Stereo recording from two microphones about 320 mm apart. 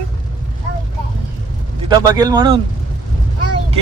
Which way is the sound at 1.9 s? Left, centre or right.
Centre.